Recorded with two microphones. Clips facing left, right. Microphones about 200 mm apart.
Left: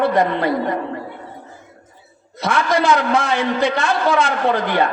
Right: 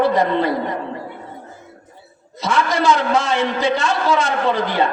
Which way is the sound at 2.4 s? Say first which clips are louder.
Left 1 dB; 55° left (ahead or behind).